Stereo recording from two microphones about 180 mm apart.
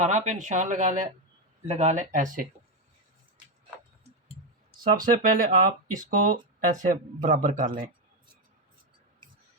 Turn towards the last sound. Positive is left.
turn(degrees=-50)  # may be behind; listen again after turning